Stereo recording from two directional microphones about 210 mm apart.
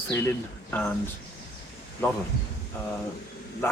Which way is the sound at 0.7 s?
5° left (ahead or behind).